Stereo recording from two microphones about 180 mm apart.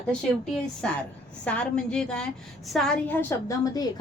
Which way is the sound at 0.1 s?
5° left (ahead or behind).